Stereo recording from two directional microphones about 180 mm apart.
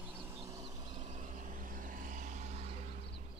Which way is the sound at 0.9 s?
40° right (ahead or behind).